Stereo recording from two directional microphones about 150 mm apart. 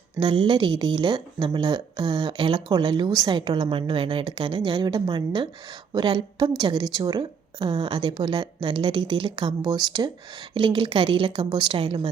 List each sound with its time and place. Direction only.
0.2 s a woman's voice: 35° right (ahead or behind)